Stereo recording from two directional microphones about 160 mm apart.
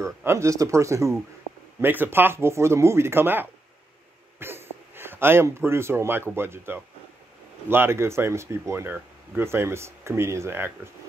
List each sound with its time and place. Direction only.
0.0 s speech: 15° right (ahead or behind)